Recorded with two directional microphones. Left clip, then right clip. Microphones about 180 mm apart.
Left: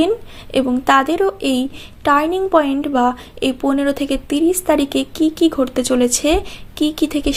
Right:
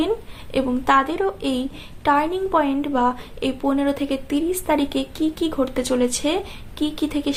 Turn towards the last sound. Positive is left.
turn(degrees=40)  # may be behind; listen again after turning